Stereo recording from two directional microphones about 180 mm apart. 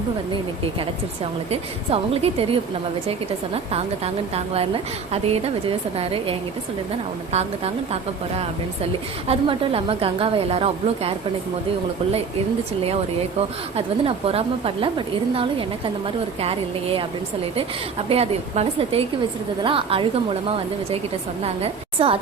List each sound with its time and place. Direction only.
1.5 s a woman's voice: 35° right (ahead or behind)
9.2 s a woman's voice: 30° right (ahead or behind)
13.7 s a woman's voice: 35° right (ahead or behind)
21.4 s a woman's voice: 30° right (ahead or behind)